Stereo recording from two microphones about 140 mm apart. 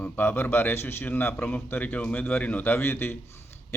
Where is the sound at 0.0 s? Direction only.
15° left (ahead or behind).